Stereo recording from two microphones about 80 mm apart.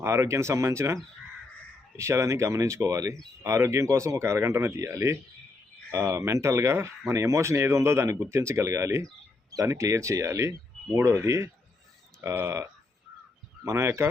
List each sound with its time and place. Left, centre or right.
0.0 s speech: right
2.0 s speech: right
13.7 s speech: right